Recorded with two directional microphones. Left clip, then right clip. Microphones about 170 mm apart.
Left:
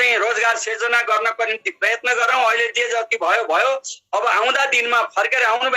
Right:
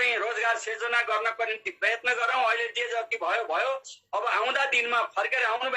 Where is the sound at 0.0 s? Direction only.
35° left (ahead or behind).